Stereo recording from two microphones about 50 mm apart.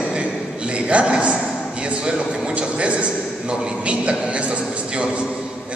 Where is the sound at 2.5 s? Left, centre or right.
Right.